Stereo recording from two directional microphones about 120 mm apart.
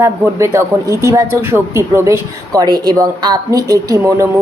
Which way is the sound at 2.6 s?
35° right (ahead or behind).